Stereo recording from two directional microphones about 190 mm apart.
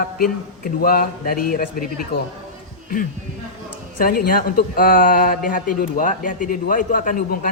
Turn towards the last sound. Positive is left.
turn(degrees=45)  # may be behind; listen again after turning